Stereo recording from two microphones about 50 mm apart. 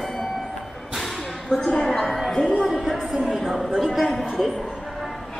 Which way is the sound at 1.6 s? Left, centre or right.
Centre.